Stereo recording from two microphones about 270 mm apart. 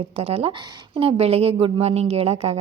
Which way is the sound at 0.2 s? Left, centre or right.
Right.